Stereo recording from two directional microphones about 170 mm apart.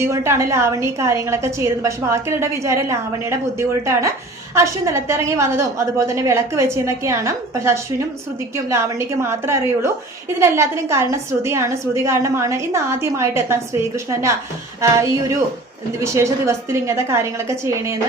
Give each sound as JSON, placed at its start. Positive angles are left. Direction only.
{"t": 0.0, "sound": "a woman's voice", "side_deg": -15}